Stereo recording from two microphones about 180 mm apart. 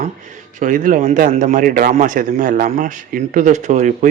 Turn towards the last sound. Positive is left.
turn(degrees=-40)  # may be behind; listen again after turning